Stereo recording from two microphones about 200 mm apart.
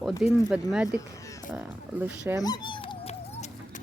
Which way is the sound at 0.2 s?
5° right (ahead or behind).